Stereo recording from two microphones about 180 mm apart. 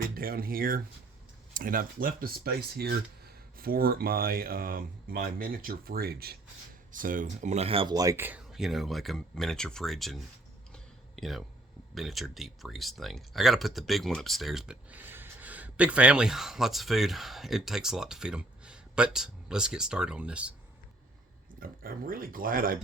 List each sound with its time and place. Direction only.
0.2 s speech: 55° right (ahead or behind); by 8.4 s 10° right (ahead or behind)
8.4 s speech: centre (ahead or behind)
21.6 s speech: 55° right (ahead or behind)